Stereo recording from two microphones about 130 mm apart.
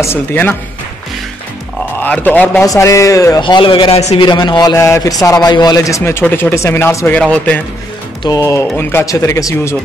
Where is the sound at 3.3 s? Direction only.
35° left (ahead or behind); by 9.8 s 20° left (ahead or behind).